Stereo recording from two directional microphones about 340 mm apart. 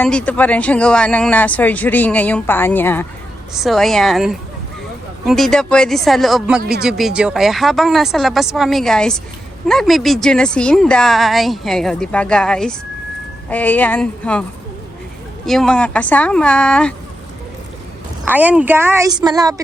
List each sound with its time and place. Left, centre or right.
0.0 s speech: centre
15.4 s speech: centre
18.3 s a woman's voice: centre